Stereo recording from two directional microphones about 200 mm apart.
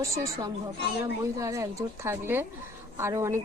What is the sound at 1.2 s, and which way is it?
Speech, 15° right (ahead or behind).